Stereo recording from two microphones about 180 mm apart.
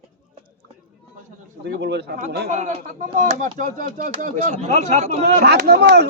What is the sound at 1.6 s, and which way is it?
Speech, 70° right (ahead or behind).